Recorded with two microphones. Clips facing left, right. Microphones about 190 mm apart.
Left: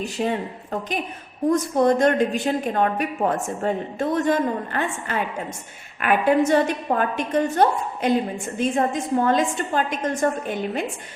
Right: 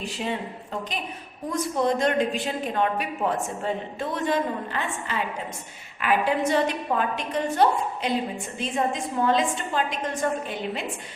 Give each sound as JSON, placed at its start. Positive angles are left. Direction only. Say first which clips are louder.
{"t": 0.0, "sound": "a woman's voice", "louder": "left 5 dB", "side_deg": 45}